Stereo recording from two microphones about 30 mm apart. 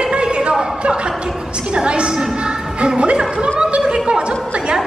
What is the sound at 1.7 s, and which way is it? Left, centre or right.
A woman's voice, right.